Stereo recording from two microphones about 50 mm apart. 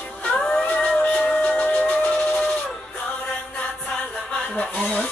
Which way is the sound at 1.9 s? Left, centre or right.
Left.